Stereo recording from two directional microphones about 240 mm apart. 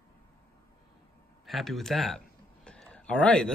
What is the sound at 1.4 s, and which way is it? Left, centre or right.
Speech, centre.